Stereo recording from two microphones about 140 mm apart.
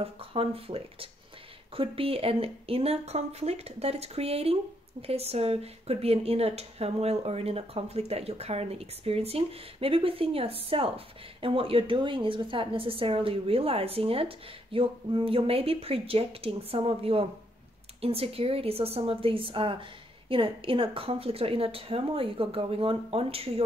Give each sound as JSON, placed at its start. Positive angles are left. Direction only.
{"t": 0.0, "sound": "a woman's voice", "side_deg": -40}